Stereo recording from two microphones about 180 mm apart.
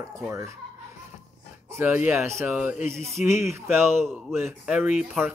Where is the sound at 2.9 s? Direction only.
Centre (ahead or behind).